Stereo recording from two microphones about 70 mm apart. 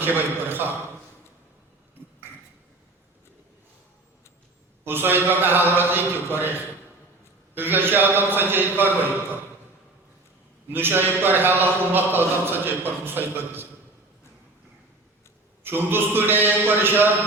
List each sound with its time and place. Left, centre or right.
0.0 s a man's voice: right
4.9 s a man's voice: right
7.5 s a man's voice: right
10.7 s a man's voice: right
15.6 s a man's voice: right